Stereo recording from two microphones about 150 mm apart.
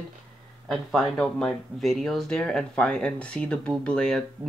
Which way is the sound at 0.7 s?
Centre (ahead or behind).